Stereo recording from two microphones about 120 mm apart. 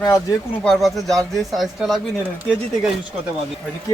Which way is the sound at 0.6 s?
Centre (ahead or behind).